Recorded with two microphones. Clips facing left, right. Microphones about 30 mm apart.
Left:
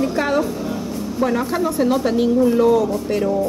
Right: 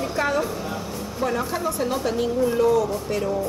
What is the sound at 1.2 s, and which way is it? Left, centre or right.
A woman's voice, centre.